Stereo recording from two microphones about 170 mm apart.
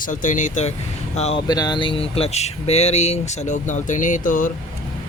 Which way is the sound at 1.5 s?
25° left (ahead or behind).